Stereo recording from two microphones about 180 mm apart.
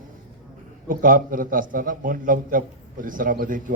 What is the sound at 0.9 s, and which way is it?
A man's voice, 50° right (ahead or behind).